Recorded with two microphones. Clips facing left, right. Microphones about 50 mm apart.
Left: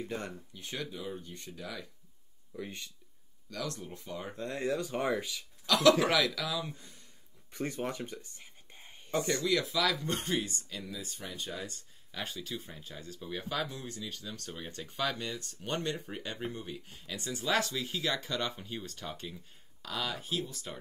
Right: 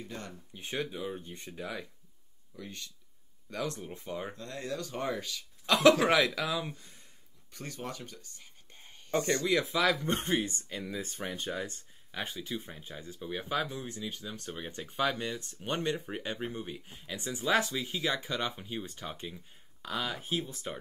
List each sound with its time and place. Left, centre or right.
0.0 s speech: centre
0.5 s speech: right
2.5 s speech: centre
3.4 s speech: right
4.4 s speech: left
5.7 s speech: right
7.5 s speech: left
9.2 s speech: right
12.1 s speech: centre